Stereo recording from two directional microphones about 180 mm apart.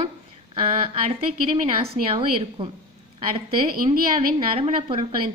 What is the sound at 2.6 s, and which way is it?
Speech, 30° right (ahead or behind).